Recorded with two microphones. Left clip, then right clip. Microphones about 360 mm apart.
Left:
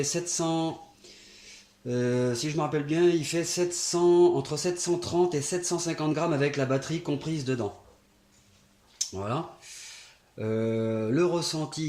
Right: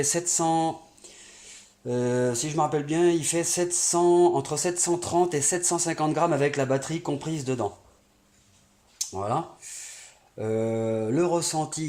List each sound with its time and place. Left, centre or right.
0.0 s speech: right
1.5 s mantra: right
2.3 s speech: right
9.0 s speech: centre
10.3 s speech: right
10.6 s speech: centre